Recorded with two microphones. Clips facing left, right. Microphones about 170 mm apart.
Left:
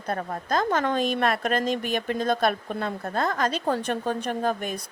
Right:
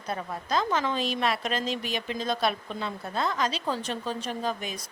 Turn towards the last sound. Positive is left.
turn(degrees=55)  # may be behind; listen again after turning